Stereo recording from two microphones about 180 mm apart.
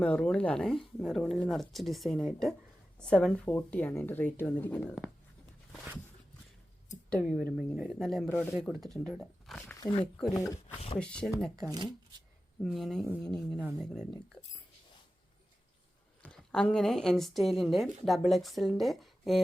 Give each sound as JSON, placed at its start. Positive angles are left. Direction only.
{"t": 0.0, "sound": "a woman's voice", "side_deg": 5}
{"t": 7.1, "sound": "speech", "side_deg": 0}
{"t": 9.8, "sound": "speech", "side_deg": 30}
{"t": 10.2, "sound": "speech", "side_deg": 5}
{"t": 10.4, "sound": "a woman's voice", "side_deg": 15}
{"t": 11.0, "sound": "speech", "side_deg": 5}
{"t": 11.7, "sound": "speech", "side_deg": -25}
{"t": 12.6, "sound": "speech", "side_deg": 0}
{"t": 16.2, "sound": "speech", "side_deg": 5}